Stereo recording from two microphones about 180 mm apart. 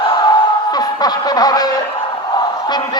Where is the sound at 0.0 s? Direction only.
25° left (ahead or behind).